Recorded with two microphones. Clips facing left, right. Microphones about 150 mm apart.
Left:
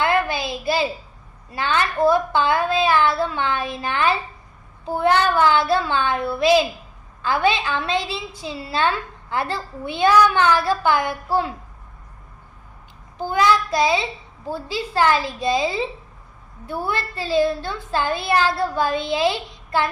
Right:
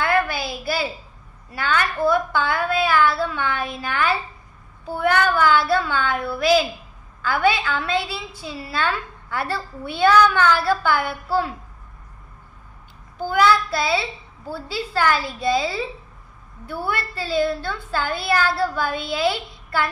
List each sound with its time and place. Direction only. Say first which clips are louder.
0.0 s a sound: left 1 dB; 20° left (ahead or behind)
1.5 s a woman's voice: left 1 dB; 25° left (ahead or behind)
13.2 s a woman's voice: even; 20° left (ahead or behind)